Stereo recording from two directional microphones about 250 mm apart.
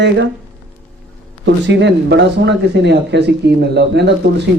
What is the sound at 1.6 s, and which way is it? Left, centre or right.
Speech, right.